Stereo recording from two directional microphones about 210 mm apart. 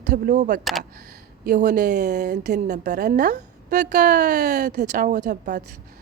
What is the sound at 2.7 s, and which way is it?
Speech, 35° right (ahead or behind).